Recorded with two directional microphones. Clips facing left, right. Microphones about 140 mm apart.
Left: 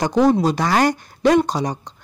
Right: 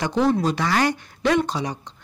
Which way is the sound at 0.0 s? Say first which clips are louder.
Left 4 dB; 40° left (ahead or behind).